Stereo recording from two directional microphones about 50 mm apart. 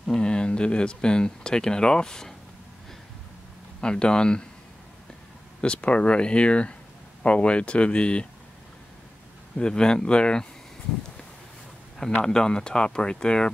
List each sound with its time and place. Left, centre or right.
0.0 s speech: centre
3.8 s speech: centre
5.6 s speech: left
9.6 s speech: centre
12.3 s speech: centre